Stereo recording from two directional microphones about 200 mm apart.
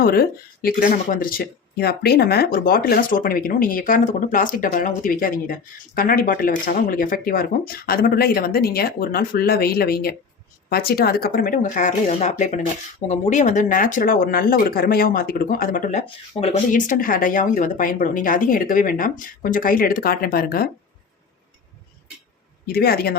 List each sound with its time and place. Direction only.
0.0 s speech: 50° left (ahead or behind)
22.6 s speech: 50° left (ahead or behind)